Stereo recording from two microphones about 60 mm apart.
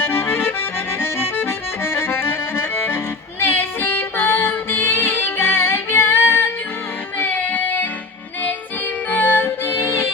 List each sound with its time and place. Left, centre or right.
0.0 s accordion: left
3.4 s music: left
7.2 s music: left
9.0 s music: left